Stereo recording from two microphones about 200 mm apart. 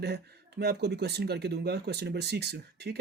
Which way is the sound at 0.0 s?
55° right (ahead or behind).